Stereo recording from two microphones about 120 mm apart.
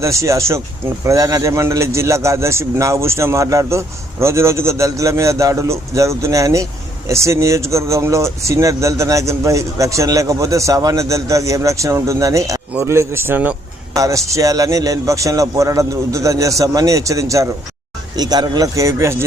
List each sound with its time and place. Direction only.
0.0 s a man's voice: 25° right (ahead or behind)
13.9 s a man's voice: 25° right (ahead or behind)